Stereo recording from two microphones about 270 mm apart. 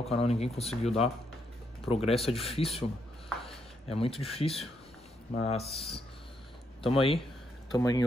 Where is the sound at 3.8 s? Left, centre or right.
Left.